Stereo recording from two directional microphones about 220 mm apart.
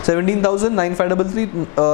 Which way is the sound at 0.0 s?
20° left (ahead or behind).